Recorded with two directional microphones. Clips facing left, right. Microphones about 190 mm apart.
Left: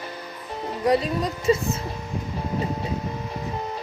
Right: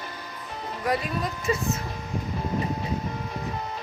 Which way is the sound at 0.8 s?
30° left (ahead or behind).